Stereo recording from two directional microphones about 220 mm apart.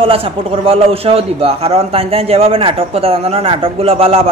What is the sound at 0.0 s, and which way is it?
A man's voice, 25° right (ahead or behind).